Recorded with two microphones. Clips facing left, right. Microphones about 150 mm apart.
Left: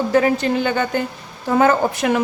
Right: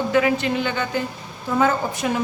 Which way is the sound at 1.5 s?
70° left (ahead or behind).